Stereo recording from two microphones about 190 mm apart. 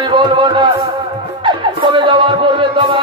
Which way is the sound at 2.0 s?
25° right (ahead or behind).